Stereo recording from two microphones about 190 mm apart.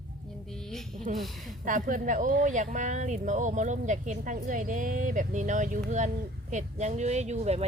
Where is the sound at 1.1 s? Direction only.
40° right (ahead or behind).